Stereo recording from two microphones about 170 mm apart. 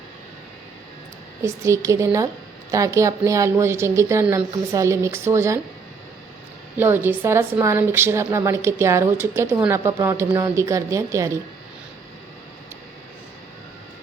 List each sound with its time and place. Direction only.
1.4 s a woman's voice: 15° right (ahead or behind)
6.7 s a woman's voice: 10° right (ahead or behind)